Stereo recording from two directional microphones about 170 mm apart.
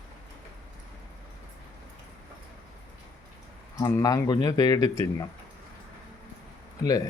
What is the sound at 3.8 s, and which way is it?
Speech, 20° left (ahead or behind).